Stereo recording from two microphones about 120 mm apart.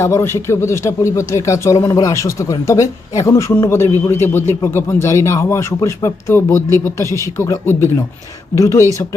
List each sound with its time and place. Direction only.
0.0 s a man's voice: 20° left (ahead or behind)